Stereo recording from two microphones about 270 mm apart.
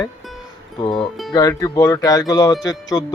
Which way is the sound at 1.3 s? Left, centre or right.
Centre.